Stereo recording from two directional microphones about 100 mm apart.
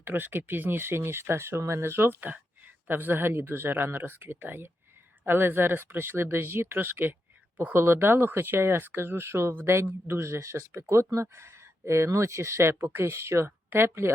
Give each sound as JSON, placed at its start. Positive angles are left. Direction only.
{"t": 0.0, "sound": "speech", "side_deg": -20}